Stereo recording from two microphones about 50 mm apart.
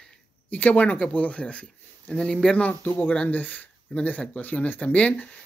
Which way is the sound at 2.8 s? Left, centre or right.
Left.